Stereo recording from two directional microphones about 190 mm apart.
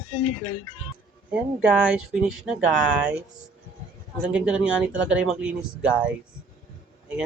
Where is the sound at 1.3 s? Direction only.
5° right (ahead or behind).